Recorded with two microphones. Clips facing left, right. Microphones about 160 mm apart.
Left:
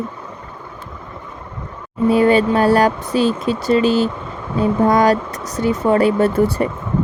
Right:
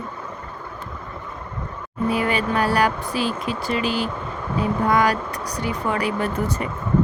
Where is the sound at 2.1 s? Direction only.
30° left (ahead or behind).